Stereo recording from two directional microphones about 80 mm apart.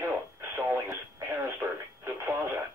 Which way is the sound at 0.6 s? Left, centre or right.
Right.